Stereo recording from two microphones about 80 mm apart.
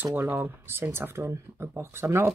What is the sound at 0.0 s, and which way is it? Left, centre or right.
Speech, right.